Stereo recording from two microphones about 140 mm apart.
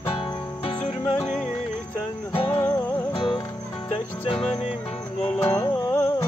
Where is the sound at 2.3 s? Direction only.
40° left (ahead or behind).